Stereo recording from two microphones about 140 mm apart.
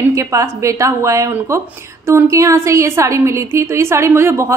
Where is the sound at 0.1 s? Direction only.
20° right (ahead or behind).